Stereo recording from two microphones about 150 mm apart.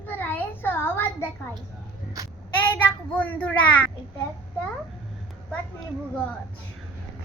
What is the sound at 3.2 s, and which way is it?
Speech, 10° left (ahead or behind).